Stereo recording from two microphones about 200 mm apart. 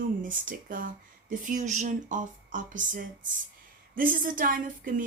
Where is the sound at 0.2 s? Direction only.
40° right (ahead or behind).